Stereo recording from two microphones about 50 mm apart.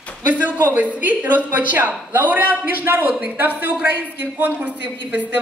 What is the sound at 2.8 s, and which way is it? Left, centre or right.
A woman's voice, right.